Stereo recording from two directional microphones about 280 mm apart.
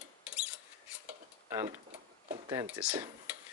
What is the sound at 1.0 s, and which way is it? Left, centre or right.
Dishes, centre.